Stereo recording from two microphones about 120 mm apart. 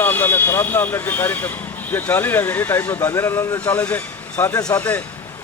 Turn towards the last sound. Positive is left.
turn(degrees=15)  # may be behind; listen again after turning